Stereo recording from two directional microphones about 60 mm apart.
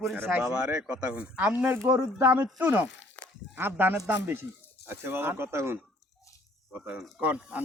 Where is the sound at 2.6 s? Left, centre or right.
Right.